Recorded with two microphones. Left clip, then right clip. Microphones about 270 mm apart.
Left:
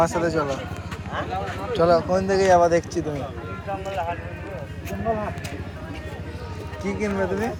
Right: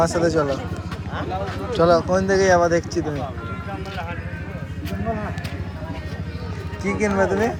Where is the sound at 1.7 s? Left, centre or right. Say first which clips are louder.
Right 2 dB; centre.